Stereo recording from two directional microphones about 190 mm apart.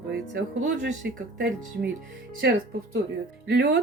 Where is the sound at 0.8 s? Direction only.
60° right (ahead or behind).